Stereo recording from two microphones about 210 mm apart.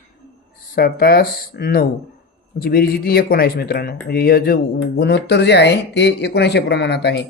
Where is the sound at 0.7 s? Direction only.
45° left (ahead or behind).